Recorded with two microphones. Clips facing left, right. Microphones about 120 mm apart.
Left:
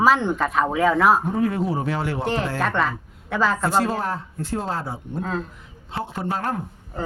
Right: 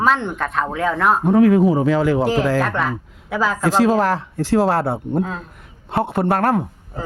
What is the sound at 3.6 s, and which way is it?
A man's voice, 90° right.